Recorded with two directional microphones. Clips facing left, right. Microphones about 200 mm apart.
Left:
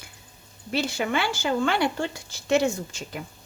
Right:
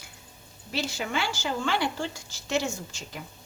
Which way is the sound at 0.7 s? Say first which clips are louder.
Left 5 dB; 60° left (ahead or behind).